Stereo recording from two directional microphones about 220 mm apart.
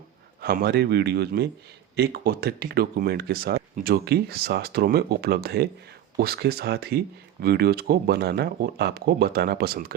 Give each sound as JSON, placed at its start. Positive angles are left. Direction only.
{"t": 0.4, "sound": "speech", "side_deg": -45}